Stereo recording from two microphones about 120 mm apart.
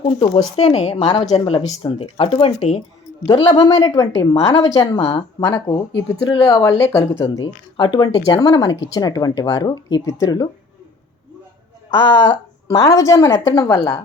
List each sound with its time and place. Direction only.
0.0 s speech: 50° left (ahead or behind)
2.6 s speech: 65° left (ahead or behind)
3.3 s a woman's voice: 35° left (ahead or behind)
12.3 s a woman's voice: 25° left (ahead or behind)
13.7 s speech: 20° left (ahead or behind)